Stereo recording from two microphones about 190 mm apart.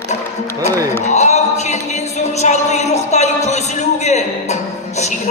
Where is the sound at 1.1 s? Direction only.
35° left (ahead or behind).